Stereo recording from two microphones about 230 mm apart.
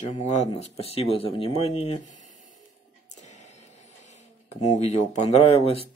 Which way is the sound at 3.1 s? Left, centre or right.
Left.